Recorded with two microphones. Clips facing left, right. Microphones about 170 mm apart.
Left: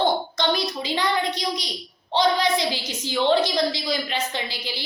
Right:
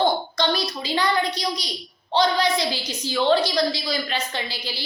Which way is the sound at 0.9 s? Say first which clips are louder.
Right 2 dB; 20° left (ahead or behind).